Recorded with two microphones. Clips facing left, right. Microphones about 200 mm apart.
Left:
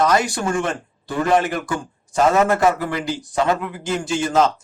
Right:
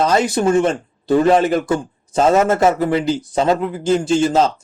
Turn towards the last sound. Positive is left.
turn(degrees=-25)  # may be behind; listen again after turning